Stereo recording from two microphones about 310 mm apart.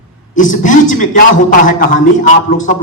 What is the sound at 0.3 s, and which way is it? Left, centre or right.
Music, left.